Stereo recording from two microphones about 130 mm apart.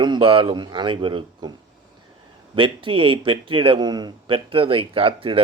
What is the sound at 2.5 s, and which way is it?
Speech, 40° right (ahead or behind).